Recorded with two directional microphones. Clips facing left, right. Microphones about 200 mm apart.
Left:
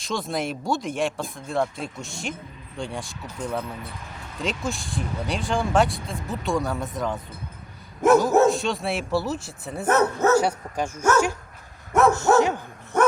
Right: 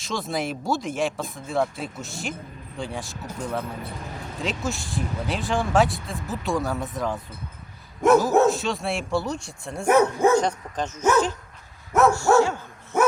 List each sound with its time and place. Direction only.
0.0 s speech: centre (ahead or behind)
9.8 s speech: 10° right (ahead or behind)
10.3 s speech: 10° left (ahead or behind)
11.9 s speech: centre (ahead or behind)
12.4 s speech: 15° left (ahead or behind)
12.9 s bow-wow: 5° right (ahead or behind)